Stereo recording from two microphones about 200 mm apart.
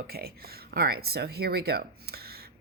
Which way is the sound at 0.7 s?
50° right (ahead or behind).